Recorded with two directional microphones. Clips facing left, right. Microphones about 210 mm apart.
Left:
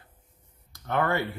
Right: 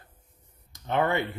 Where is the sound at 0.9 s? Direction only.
20° right (ahead or behind).